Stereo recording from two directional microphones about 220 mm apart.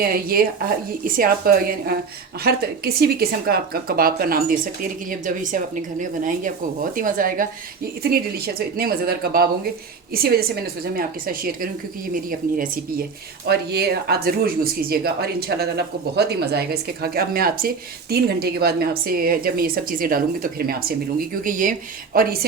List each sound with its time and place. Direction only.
0.0 s speech: 40° right (ahead or behind)